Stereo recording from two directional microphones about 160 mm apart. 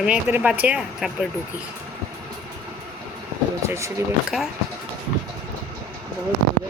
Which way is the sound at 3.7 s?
20° right (ahead or behind).